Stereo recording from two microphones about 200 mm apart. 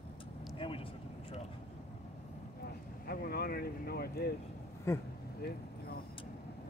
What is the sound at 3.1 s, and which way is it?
Speech, 50° left (ahead or behind).